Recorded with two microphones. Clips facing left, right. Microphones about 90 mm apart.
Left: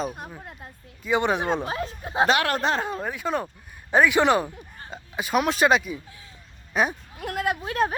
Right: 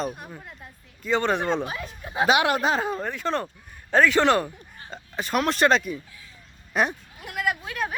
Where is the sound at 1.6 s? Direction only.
30° left (ahead or behind).